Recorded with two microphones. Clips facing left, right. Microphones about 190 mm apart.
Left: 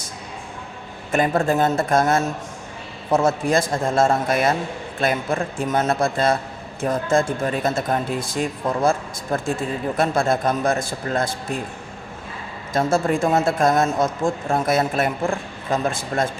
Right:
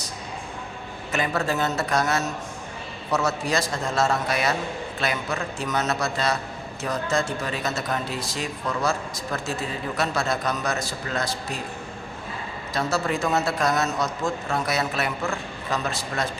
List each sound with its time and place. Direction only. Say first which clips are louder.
1.1 s a man's voice: left 6 dB; 50° left (ahead or behind)
12.7 s a man's voice: left 6 dB; 50° left (ahead or behind)